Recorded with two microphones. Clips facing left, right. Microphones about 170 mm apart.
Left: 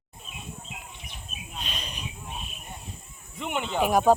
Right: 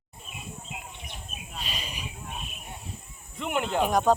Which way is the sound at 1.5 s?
Centre (ahead or behind).